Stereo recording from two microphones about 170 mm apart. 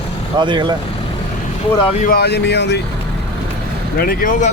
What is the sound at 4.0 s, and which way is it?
Speech, 60° left (ahead or behind).